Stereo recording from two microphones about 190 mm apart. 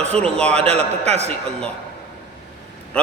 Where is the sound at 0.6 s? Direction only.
35° right (ahead or behind).